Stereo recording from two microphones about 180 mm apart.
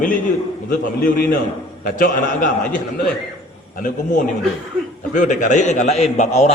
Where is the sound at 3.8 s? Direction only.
45° left (ahead or behind).